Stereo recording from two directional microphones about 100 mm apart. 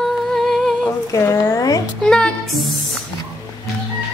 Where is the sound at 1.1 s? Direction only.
30° left (ahead or behind).